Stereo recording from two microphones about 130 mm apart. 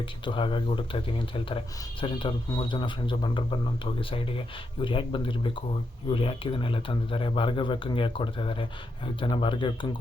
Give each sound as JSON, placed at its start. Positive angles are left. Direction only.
{"t": 0.3, "sound": "speech", "side_deg": 40}